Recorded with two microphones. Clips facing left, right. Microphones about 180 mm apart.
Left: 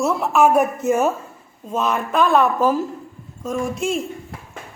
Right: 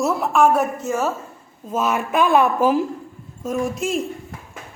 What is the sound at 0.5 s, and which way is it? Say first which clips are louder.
Speech: left 4 dB; 15° left (ahead or behind).